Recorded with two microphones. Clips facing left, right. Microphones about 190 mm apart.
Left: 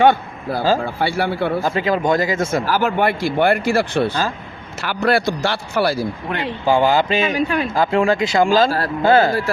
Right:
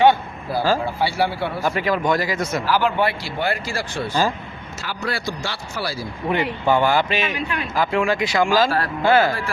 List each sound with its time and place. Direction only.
0.0 s a sound: 50° left (ahead or behind)
0.9 s speech: 55° left (ahead or behind)
1.7 s speech: 25° left (ahead or behind)
2.6 s speech: 45° left (ahead or behind)
6.7 s speech: 15° left (ahead or behind)
7.1 s a man's voice: 30° left (ahead or behind)